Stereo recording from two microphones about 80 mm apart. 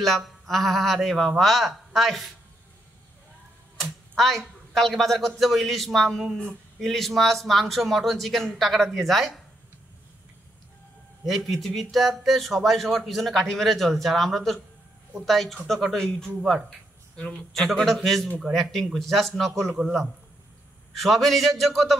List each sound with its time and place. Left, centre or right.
0.0 s speech: centre
4.2 s speech: centre
11.2 s speech: centre
17.6 s speech: centre